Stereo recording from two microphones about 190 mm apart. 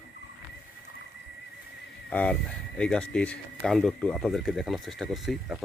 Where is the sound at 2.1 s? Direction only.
10° left (ahead or behind).